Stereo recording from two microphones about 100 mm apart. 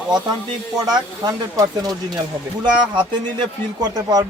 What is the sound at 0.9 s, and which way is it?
Speech, 40° right (ahead or behind).